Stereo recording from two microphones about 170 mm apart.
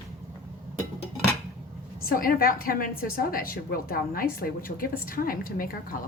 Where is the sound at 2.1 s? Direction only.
60° left (ahead or behind).